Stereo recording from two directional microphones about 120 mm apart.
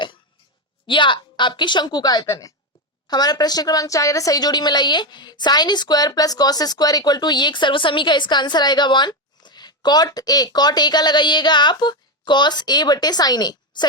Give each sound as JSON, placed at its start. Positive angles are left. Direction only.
{"t": 0.9, "sound": "a woman's voice", "side_deg": 40}